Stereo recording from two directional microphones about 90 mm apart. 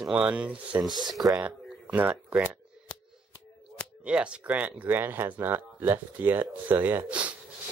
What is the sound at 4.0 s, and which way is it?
Speech, 10° right (ahead or behind).